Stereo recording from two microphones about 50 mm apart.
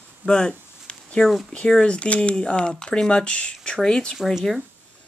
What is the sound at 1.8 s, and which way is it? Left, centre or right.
Speech, left.